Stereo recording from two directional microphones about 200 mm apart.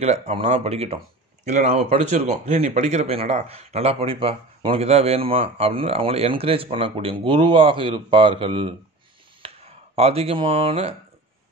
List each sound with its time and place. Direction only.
0.0 s speech: 30° right (ahead or behind)
9.9 s speech: 30° right (ahead or behind)